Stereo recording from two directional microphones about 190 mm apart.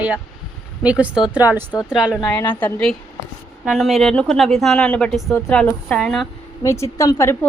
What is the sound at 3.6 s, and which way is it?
A woman's voice, 5° right (ahead or behind).